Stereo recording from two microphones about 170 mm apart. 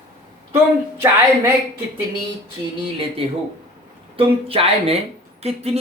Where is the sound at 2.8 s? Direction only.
30° right (ahead or behind).